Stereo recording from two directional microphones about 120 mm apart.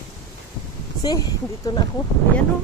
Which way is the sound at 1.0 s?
35° left (ahead or behind).